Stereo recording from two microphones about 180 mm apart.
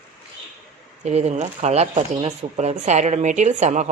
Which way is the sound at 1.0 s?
40° right (ahead or behind).